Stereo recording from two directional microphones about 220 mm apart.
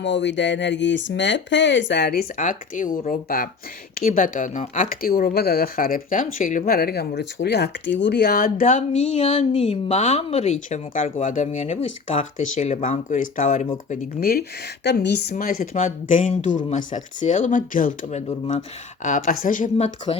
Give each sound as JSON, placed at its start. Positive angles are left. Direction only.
{"t": 0.0, "sound": "a woman's voice", "side_deg": 55}